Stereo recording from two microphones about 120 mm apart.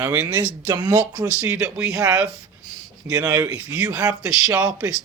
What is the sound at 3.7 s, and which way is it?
Speech, 10° right (ahead or behind).